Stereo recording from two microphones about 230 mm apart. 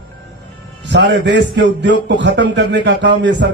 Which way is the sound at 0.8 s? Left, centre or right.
Right.